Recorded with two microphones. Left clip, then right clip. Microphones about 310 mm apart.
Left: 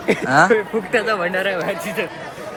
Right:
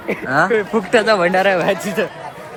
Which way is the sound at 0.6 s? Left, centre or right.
Right.